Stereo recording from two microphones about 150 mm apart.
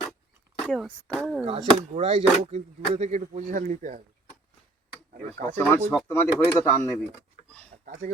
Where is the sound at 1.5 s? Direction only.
45° right (ahead or behind).